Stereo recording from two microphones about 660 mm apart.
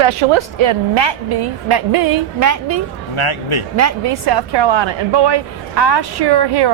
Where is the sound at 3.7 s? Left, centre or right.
Right.